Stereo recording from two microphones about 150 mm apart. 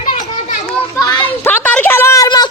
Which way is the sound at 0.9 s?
25° left (ahead or behind).